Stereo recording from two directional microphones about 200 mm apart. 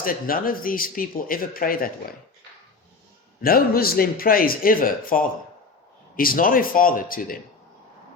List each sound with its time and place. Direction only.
0.0 s speech: 45° left (ahead or behind)
3.4 s speech: 50° left (ahead or behind)